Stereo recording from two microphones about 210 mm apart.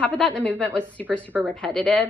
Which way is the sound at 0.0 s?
5° left (ahead or behind).